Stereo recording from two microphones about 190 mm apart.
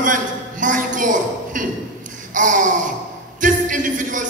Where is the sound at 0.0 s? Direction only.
45° right (ahead or behind).